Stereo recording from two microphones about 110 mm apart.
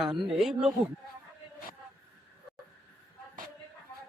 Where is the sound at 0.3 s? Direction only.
5° right (ahead or behind).